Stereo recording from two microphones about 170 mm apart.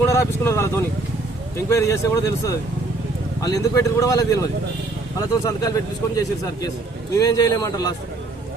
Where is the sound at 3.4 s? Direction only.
20° left (ahead or behind).